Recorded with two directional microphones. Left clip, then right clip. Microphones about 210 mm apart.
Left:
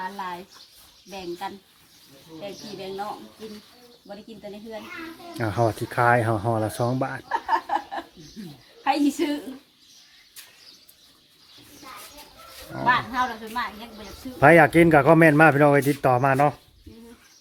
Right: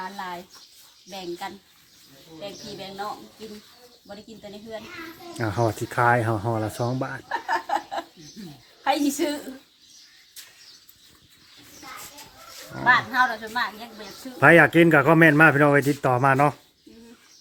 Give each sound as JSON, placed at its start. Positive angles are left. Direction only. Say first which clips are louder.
{"t": 1.1, "sound": "a woman's voice", "louder": "left 1 dB", "side_deg": -20}
{"t": 5.4, "sound": "speech", "louder": "left 1 dB", "side_deg": -5}
{"t": 7.3, "sound": "a sound", "louder": "left 1 dB", "side_deg": -15}
{"t": 8.8, "sound": "a woman's voice", "louder": "even", "side_deg": -20}
{"t": 12.7, "sound": "speech", "louder": "right 3 dB", "side_deg": -10}
{"t": 14.3, "sound": "speech", "louder": "even", "side_deg": -5}